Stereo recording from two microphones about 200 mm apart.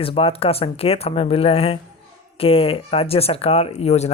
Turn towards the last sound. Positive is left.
turn(degrees=30)  # may be behind; listen again after turning